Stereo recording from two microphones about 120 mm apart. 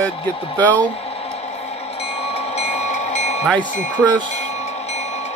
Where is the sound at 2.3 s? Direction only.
60° left (ahead or behind).